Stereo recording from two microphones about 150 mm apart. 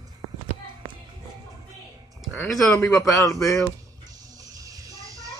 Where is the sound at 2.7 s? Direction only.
20° left (ahead or behind).